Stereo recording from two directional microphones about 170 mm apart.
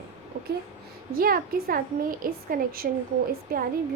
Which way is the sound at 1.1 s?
60° right (ahead or behind).